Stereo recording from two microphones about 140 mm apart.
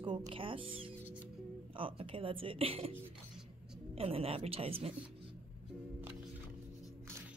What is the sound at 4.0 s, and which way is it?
Speech, 45° right (ahead or behind).